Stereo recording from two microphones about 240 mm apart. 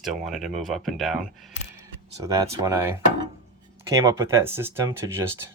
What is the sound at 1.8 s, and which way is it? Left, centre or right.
Speech, centre.